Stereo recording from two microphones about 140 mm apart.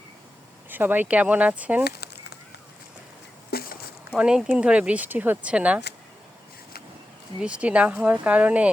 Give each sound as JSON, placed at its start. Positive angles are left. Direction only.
{"t": 0.7, "sound": "speech", "side_deg": -15}
{"t": 3.5, "sound": "a sound", "side_deg": 90}
{"t": 4.1, "sound": "speech", "side_deg": -5}
{"t": 7.3, "sound": "speech", "side_deg": -10}